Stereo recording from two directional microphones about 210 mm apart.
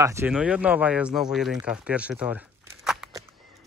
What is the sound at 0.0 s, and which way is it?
A child's voice, 15° right (ahead or behind).